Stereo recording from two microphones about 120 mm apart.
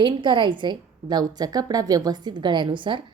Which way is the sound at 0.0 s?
45° right (ahead or behind).